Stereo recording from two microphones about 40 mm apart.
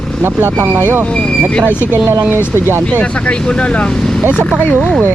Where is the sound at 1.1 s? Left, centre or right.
Left.